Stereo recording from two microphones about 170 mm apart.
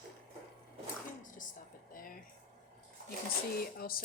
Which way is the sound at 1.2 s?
50° left (ahead or behind).